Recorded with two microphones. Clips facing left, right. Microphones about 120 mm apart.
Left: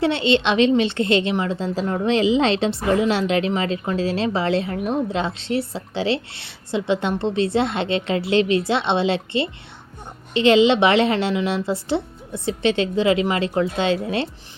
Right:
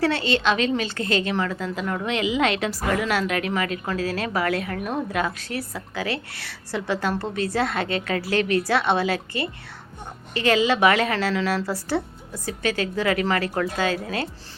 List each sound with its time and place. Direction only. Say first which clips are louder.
0.0 s a woman's voice: left 3 dB; 25° left (ahead or behind)